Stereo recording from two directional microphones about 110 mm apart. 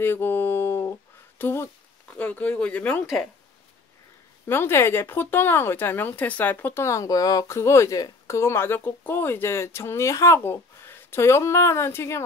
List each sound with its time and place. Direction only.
0.0 s a sound: 20° left (ahead or behind)
1.4 s speech: 25° left (ahead or behind)
4.5 s speech: 20° left (ahead or behind)